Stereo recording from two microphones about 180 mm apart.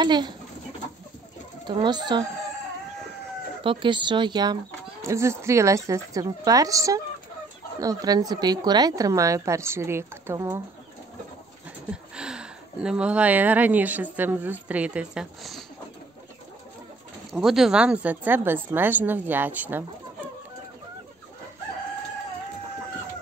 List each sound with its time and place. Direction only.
0.0 s speech: 25° right (ahead or behind)
1.7 s speech: 25° right (ahead or behind)
3.6 s a woman's voice: 25° right (ahead or behind)
11.9 s speech: 5° right (ahead or behind)
17.3 s a woman's voice: centre (ahead or behind)